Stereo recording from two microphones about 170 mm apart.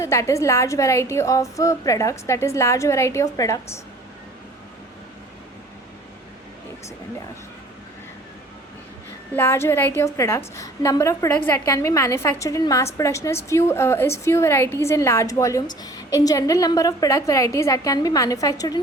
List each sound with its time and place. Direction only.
0.0 s a woman's voice: 15° left (ahead or behind)
9.3 s a woman's voice: 10° left (ahead or behind)